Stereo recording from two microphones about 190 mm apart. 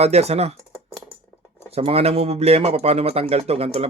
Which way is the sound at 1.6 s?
30° right (ahead or behind).